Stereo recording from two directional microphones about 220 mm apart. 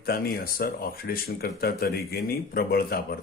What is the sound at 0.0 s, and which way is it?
Speech, 45° left (ahead or behind).